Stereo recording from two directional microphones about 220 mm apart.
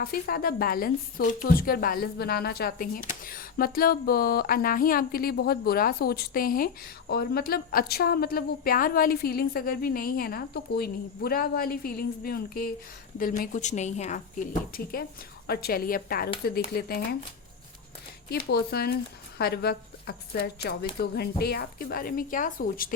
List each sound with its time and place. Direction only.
0.0 s a woman's voice: 40° left (ahead or behind)
15.4 s speech: 45° left (ahead or behind)
18.3 s a woman's voice: 45° left (ahead or behind)